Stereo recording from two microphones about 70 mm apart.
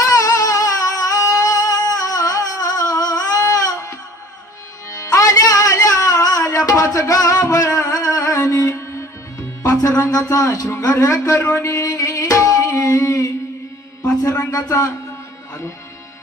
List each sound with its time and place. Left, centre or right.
0.0 s music: left
4.9 s music: left
10.0 s speech: left
10.9 s a sound: left
13.1 s music: left
14.3 s speech: left